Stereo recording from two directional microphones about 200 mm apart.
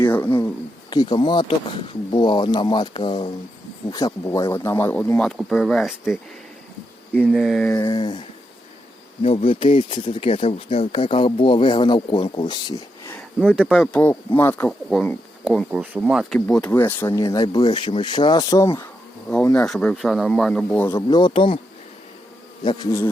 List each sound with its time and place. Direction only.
0.0 s a sound: 10° left (ahead or behind)
0.9 s speech: 25° left (ahead or behind); by 7.7 s centre (ahead or behind)
7.7 s speech: 20° left (ahead or behind)
9.2 s speech: 25° left (ahead or behind)
13.5 s speech: centre (ahead or behind)
19.5 s speech: 5° left (ahead or behind); by 21.6 s 25° left (ahead or behind)
22.6 s speech: 20° left (ahead or behind)